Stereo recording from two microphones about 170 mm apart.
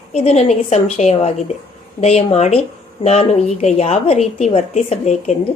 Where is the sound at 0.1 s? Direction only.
40° left (ahead or behind).